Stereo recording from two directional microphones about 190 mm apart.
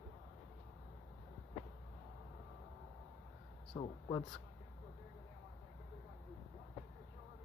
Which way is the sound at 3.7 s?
25° left (ahead or behind).